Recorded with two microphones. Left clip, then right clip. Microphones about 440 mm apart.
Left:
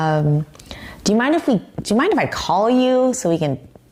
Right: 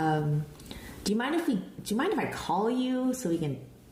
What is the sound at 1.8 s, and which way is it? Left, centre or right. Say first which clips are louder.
Speech: left 12 dB; left.